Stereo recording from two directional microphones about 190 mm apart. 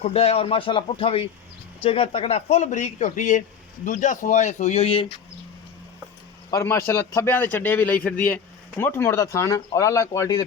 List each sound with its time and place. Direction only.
0.0 s a man's voice: 35° left (ahead or behind)
6.5 s a man's voice: 15° left (ahead or behind)